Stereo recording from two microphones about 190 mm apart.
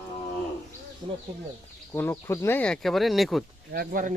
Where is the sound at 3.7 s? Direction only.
50° right (ahead or behind).